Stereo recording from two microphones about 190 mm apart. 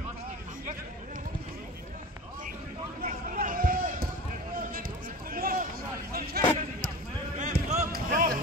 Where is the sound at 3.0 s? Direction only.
50° right (ahead or behind).